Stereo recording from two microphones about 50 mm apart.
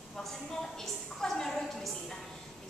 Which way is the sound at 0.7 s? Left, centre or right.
Centre.